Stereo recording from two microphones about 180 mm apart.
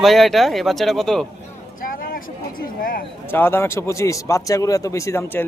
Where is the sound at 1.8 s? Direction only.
50° left (ahead or behind).